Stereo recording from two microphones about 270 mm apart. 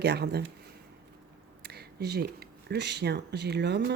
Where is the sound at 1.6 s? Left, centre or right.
Right.